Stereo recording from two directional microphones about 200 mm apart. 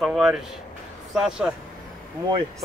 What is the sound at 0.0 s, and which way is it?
Speech, centre (ahead or behind).